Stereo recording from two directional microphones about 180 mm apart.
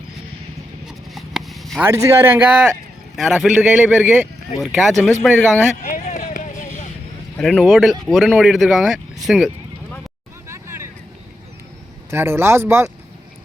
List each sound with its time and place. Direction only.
0.9 s a sound: centre (ahead or behind)
1.8 s speech: 15° right (ahead or behind)
5.8 s vehicle: 45° left (ahead or behind)
7.3 s speech: centre (ahead or behind)
10.5 s vehicle: 15° right (ahead or behind)
12.1 s speech: 15° right (ahead or behind)